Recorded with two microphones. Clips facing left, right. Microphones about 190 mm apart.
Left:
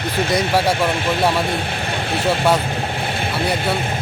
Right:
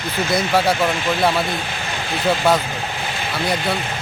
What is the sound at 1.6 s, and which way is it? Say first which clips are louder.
Vehicle: left 3 dB; 60° left (ahead or behind).